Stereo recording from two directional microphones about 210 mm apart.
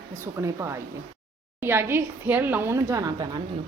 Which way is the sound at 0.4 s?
15° right (ahead or behind).